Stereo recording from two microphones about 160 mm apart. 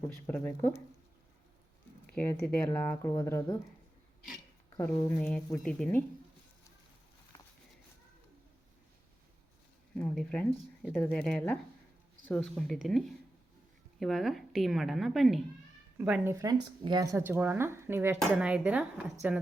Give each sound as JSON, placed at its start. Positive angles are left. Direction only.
{"t": 0.3, "sound": "speech", "side_deg": 10}
{"t": 2.0, "sound": "speech", "side_deg": 10}
{"t": 4.8, "sound": "speech", "side_deg": 20}
{"t": 5.2, "sound": "a woman's voice", "side_deg": 5}
{"t": 9.9, "sound": "a sound", "side_deg": 5}
{"t": 10.9, "sound": "a woman's voice", "side_deg": 10}
{"t": 16.3, "sound": "speech", "side_deg": -20}